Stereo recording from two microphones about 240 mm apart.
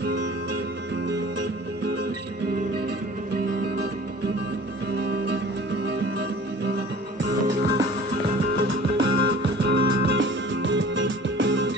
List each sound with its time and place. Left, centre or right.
0.0 s music: right
4.9 s music: right
8.9 s music: right